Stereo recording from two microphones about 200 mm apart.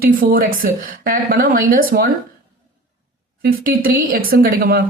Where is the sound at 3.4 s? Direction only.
45° right (ahead or behind).